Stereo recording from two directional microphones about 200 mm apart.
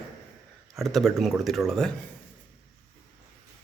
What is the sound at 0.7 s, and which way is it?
Speech, centre (ahead or behind).